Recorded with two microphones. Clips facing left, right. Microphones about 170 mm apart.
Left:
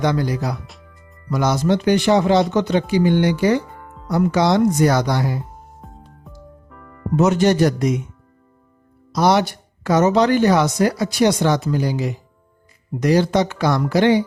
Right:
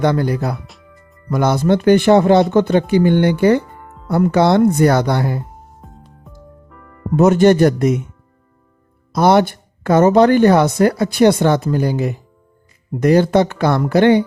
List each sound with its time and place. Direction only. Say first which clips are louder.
0.0 s speech: right 3 dB; 55° right (ahead or behind)
0.7 s music: right 1 dB; centre (ahead or behind)
1.3 s speech: right 3 dB; 55° right (ahead or behind)
5.8 s music: even; centre (ahead or behind)
7.2 s speech: right 5 dB; 55° right (ahead or behind)
9.1 s speech: right 4 dB; 55° right (ahead or behind)